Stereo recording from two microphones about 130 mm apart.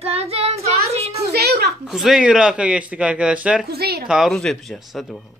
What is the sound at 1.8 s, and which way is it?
Speech, 5° right (ahead or behind).